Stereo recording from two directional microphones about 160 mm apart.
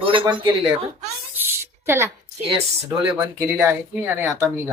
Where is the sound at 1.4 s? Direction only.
15° right (ahead or behind).